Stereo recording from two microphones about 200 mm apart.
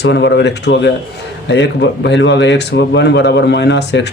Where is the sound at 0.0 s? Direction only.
60° left (ahead or behind).